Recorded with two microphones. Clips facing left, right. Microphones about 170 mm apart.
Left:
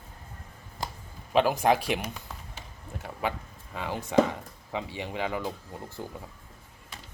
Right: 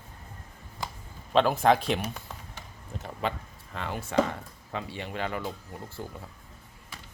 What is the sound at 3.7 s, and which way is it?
Speech, 15° left (ahead or behind).